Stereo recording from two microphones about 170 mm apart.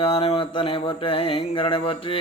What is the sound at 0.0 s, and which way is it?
Speech, 35° left (ahead or behind).